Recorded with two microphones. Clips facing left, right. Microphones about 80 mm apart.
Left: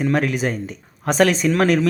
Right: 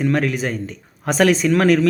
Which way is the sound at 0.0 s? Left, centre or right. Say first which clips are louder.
Even; centre.